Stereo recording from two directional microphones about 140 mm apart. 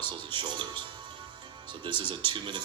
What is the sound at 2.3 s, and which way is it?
Speech, 35° right (ahead or behind).